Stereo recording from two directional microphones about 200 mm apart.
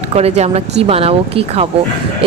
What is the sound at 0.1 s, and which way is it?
A woman's voice, 30° right (ahead or behind).